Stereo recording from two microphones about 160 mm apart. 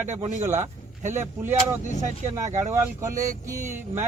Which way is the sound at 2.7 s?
15° right (ahead or behind).